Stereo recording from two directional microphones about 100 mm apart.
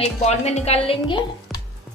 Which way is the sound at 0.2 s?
90° left.